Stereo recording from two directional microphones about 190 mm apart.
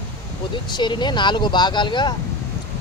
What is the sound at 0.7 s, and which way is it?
Speech, 25° left (ahead or behind).